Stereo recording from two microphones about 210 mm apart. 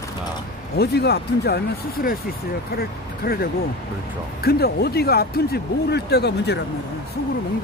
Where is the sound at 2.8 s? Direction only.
45° left (ahead or behind).